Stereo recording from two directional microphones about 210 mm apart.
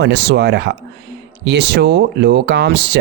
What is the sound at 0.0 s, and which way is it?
A man's voice, 50° right (ahead or behind).